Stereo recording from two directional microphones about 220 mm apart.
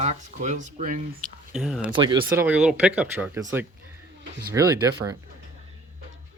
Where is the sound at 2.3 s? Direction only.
10° right (ahead or behind).